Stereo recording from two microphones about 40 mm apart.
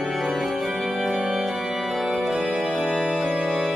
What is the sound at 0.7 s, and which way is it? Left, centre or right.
Organ, centre.